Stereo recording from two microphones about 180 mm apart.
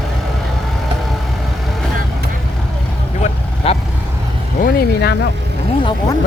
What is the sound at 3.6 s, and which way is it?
Vehicle, 35° left (ahead or behind).